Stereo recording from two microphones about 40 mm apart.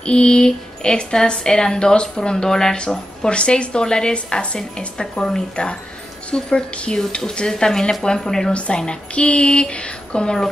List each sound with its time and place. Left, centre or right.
0.0 s a woman's voice: left
8.5 s a woman's voice: left